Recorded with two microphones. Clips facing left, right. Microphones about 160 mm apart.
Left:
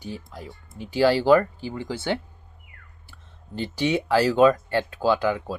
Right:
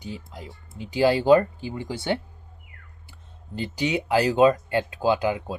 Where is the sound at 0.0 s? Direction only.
15° right (ahead or behind).